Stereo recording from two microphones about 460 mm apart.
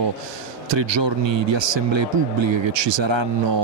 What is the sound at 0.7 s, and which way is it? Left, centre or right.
Speech, right.